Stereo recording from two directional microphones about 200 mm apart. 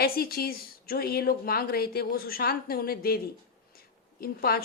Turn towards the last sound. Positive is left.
turn(degrees=50)  # may be behind; listen again after turning